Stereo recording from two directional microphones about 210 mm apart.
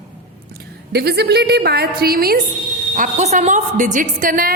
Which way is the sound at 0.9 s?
50° right (ahead or behind).